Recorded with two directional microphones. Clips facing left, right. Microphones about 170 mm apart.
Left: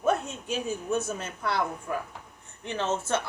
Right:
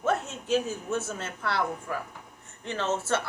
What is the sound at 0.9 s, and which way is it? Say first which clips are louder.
Speech: left 2 dB; 15° left (ahead or behind).